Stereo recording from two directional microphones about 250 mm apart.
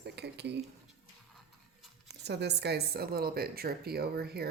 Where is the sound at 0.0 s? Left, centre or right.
Right.